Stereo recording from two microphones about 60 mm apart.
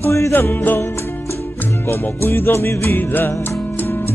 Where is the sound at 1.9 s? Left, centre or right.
Left.